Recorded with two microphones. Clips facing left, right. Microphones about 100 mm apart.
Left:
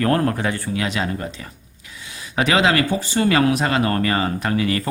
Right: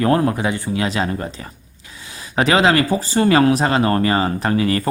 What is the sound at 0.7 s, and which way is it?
Speech, 30° right (ahead or behind).